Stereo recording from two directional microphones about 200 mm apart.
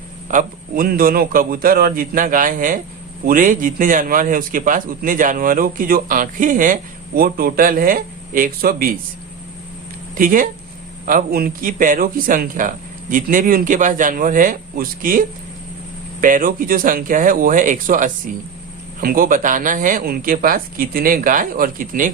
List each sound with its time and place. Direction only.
0.3 s a man's voice: 40° right (ahead or behind)
10.2 s a man's voice: 45° right (ahead or behind)
16.2 s a man's voice: 45° right (ahead or behind)